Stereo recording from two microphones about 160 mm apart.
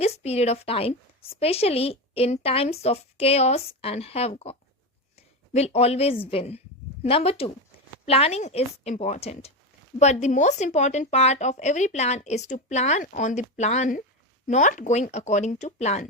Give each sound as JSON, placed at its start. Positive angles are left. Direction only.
{"t": 0.0, "sound": "a woman's voice", "side_deg": 40}